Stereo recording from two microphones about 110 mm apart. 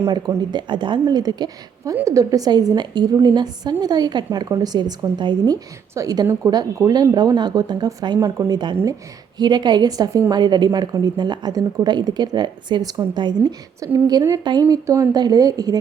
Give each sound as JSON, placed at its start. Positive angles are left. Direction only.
{"t": 0.5, "sound": "a woman's voice", "side_deg": -45}
{"t": 5.9, "sound": "a woman's voice", "side_deg": -30}
{"t": 8.2, "sound": "speech", "side_deg": -25}
{"t": 9.4, "sound": "a woman's voice", "side_deg": -40}